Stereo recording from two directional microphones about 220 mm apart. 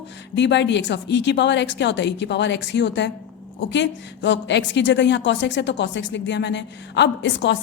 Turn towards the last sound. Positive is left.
turn(degrees=55)  # may be behind; listen again after turning